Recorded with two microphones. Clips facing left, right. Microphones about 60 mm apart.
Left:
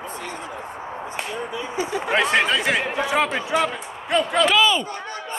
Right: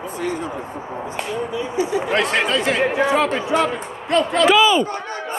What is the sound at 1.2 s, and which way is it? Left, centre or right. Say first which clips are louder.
Speech: right 5 dB; centre.